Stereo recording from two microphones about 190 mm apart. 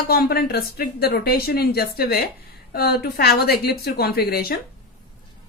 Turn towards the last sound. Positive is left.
turn(degrees=55)  # may be behind; listen again after turning